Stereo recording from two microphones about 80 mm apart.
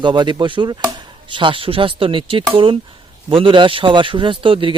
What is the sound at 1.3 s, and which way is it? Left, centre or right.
Speech, right.